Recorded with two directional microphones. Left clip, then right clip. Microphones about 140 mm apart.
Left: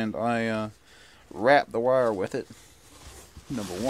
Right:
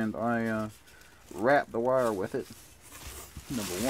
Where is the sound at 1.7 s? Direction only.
25° left (ahead or behind).